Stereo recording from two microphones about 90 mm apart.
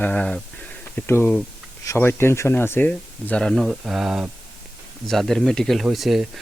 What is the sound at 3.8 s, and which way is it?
Speech, 5° right (ahead or behind).